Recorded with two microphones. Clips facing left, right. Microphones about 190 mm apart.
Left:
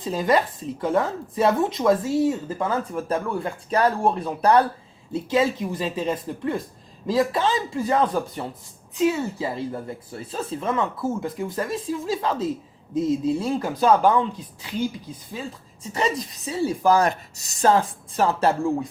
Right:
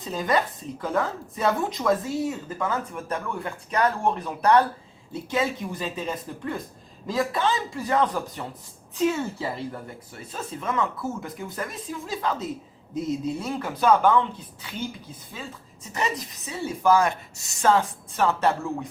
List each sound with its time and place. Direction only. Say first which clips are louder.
0.0 s speech: left 4 dB; 25° left (ahead or behind)
9.0 s speech: left 2 dB; 15° left (ahead or behind)
15.8 s a woman's voice: left 4 dB; 30° left (ahead or behind)